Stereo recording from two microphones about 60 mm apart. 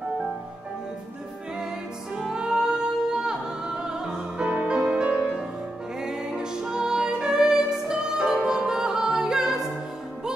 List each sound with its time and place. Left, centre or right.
2.1 s music: centre